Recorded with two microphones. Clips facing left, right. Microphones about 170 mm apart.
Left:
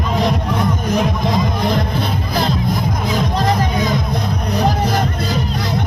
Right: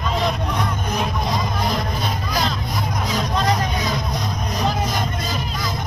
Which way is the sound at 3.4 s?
50° left (ahead or behind).